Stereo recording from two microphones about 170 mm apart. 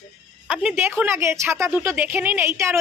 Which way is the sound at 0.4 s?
5° right (ahead or behind).